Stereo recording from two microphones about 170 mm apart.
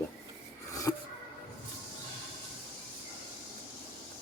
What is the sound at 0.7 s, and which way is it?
Rub, 20° left (ahead or behind).